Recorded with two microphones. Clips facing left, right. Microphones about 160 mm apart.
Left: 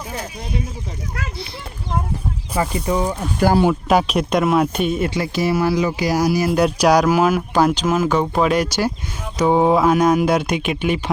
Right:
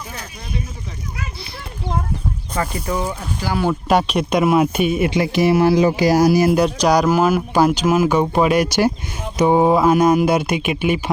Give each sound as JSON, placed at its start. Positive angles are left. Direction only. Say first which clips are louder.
{"t": 2.7, "sound": "speech", "louder": "left 3 dB", "side_deg": 15}
{"t": 3.7, "sound": "speech", "louder": "even", "side_deg": 0}
{"t": 6.6, "sound": "speech", "louder": "left 1 dB", "side_deg": 5}